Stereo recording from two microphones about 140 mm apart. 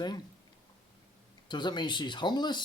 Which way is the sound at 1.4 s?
30° left (ahead or behind).